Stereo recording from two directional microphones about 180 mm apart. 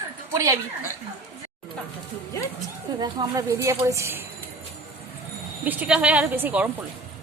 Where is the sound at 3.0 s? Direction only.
20° right (ahead or behind).